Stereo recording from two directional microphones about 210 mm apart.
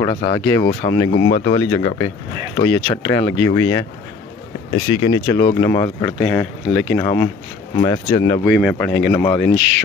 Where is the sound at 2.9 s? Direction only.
15° left (ahead or behind).